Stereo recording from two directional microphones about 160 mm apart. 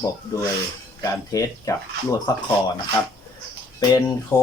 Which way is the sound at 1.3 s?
20° left (ahead or behind).